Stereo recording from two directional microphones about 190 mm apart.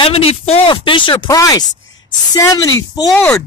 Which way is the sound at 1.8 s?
85° left.